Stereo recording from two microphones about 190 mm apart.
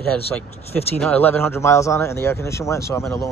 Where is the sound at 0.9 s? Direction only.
10° left (ahead or behind).